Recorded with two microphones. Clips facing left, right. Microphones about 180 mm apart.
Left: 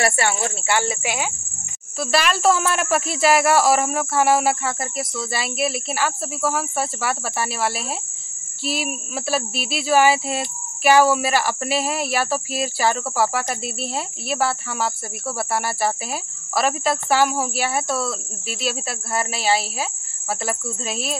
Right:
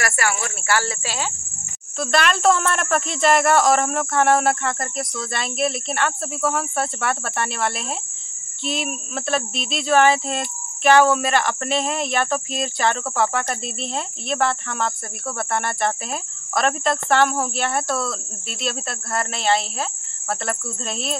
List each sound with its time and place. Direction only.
0.0 s speech: 25° left (ahead or behind)
2.0 s speech: 5° left (ahead or behind)